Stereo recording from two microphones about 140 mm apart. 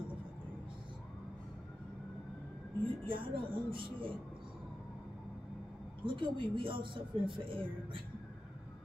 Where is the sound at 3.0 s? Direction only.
35° right (ahead or behind).